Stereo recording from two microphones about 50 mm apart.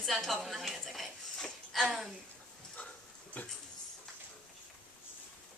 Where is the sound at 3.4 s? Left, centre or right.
Left.